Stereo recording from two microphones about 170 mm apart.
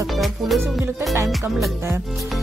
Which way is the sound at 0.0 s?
Centre (ahead or behind).